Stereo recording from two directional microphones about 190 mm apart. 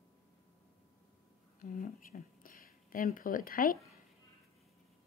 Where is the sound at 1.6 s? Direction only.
45° left (ahead or behind).